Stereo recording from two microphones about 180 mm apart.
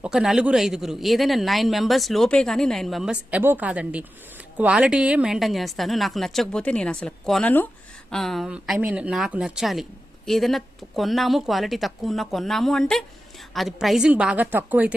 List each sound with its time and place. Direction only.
0.0 s speech: 5° right (ahead or behind)